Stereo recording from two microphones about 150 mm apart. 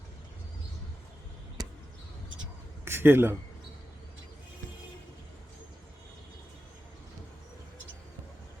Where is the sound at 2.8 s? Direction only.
15° right (ahead or behind).